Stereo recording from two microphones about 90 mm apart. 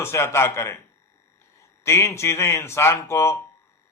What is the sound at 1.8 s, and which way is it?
Speech, 30° left (ahead or behind).